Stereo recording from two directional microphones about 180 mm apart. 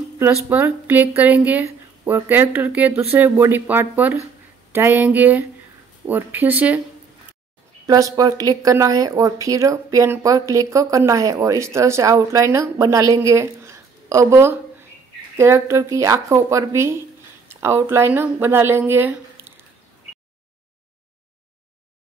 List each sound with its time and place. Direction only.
0.2 s speech: 10° right (ahead or behind)
7.8 s speech: 20° right (ahead or behind)